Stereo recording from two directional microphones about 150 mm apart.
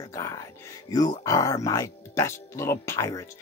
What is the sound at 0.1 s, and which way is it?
Speech, 20° left (ahead or behind).